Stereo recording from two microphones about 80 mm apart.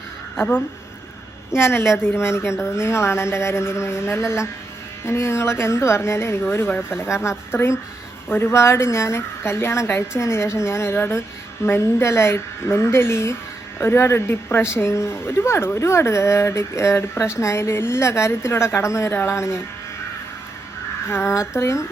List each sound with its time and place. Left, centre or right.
0.3 s a woman's voice: left
21.1 s speech: left